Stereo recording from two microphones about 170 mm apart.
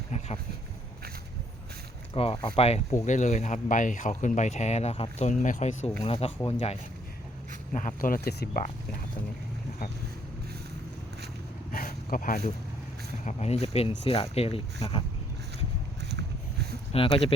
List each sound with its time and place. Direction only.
2.1 s speech: 35° left (ahead or behind)
7.7 s speech: 50° left (ahead or behind); by 8.6 s 70° left (ahead or behind)
11.7 s a sound: 55° left (ahead or behind)
13.2 s speech: 40° left (ahead or behind)
16.9 s speech: 35° left (ahead or behind)